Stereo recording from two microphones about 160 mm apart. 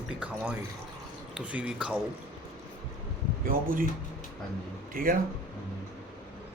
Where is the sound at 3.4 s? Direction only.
65° right (ahead or behind).